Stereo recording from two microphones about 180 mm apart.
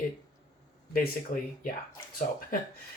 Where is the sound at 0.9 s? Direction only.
55° left (ahead or behind).